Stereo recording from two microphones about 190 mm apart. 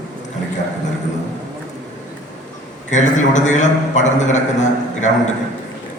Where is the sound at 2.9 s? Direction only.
40° left (ahead or behind).